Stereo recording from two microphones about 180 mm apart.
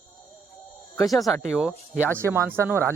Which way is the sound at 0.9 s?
Centre (ahead or behind).